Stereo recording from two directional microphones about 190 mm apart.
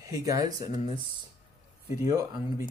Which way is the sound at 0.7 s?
30° left (ahead or behind).